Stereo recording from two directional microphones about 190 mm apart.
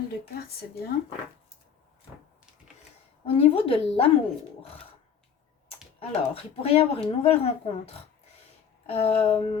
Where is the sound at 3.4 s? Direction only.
30° left (ahead or behind).